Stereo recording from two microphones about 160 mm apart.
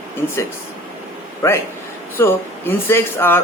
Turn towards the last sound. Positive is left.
turn(degrees=15)  # may be behind; listen again after turning